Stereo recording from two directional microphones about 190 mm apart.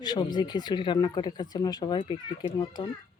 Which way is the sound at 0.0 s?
20° left (ahead or behind).